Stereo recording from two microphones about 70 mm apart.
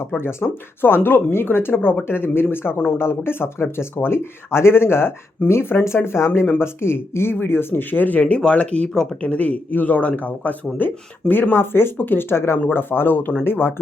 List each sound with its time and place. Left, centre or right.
0.2 s speech: left